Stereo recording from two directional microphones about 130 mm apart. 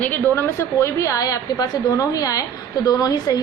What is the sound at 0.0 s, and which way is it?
A woman's voice, 15° left (ahead or behind).